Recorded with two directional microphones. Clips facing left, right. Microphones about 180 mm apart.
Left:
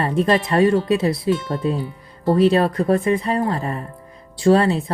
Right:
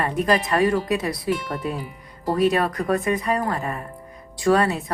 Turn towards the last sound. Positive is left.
turn(degrees=25)  # may be behind; listen again after turning